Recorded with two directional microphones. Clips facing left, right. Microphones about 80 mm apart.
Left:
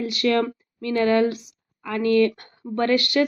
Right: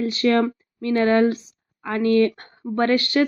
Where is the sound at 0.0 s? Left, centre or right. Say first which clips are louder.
Right 2 dB; right.